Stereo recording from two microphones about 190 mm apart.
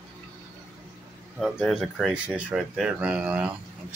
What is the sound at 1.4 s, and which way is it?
Speech, centre (ahead or behind).